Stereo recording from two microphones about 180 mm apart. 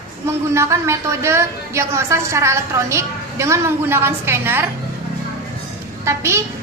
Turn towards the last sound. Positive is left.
turn(degrees=-15)  # may be behind; listen again after turning